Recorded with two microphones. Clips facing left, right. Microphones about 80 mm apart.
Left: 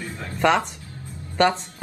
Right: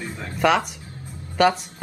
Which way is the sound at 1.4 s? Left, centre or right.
Centre.